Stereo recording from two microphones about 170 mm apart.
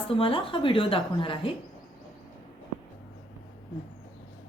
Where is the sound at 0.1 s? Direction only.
30° left (ahead or behind).